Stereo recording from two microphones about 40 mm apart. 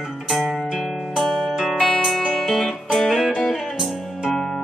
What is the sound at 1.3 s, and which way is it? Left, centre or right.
Music, centre.